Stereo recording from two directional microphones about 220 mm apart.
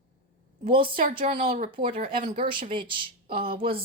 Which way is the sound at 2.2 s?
25° right (ahead or behind).